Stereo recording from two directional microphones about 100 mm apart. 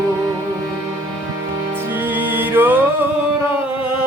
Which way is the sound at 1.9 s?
20° right (ahead or behind).